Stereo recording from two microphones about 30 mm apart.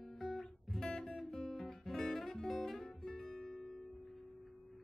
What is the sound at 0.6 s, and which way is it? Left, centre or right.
Music, centre.